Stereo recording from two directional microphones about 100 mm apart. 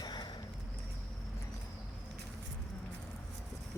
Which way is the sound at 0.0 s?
45° left (ahead or behind).